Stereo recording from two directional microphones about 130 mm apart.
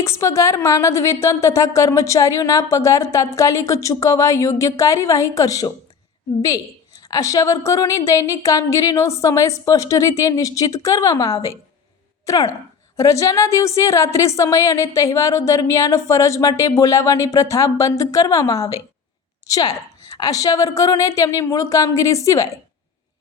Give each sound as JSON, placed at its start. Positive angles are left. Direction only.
{"t": 0.0, "sound": "a woman's voice", "side_deg": 20}
{"t": 7.0, "sound": "a woman's voice", "side_deg": 25}